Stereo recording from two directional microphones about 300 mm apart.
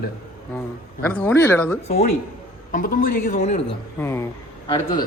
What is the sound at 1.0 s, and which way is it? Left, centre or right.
Speech, centre.